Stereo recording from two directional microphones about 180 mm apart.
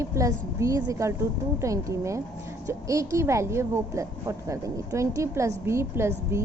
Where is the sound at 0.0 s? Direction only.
15° right (ahead or behind).